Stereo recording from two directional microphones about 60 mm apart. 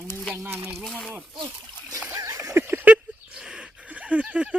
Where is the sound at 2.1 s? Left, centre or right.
Right.